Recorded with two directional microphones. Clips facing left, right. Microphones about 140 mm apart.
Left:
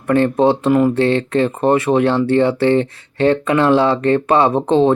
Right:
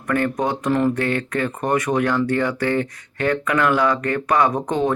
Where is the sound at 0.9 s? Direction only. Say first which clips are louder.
Left 7 dB; 25° left (ahead or behind).